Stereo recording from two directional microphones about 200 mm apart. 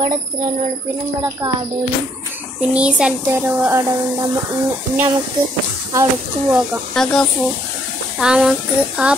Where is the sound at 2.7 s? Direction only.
5° right (ahead or behind).